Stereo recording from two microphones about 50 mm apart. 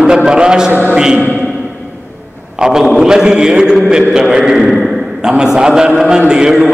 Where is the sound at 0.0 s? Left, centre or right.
Centre.